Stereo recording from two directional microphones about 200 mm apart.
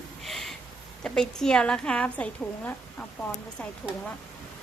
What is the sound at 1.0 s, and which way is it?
A woman's voice, 5° left (ahead or behind).